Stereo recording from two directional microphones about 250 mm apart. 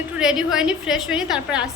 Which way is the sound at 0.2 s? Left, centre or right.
Centre.